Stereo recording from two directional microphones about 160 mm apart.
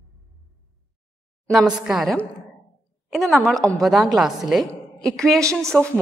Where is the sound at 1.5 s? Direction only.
Centre (ahead or behind).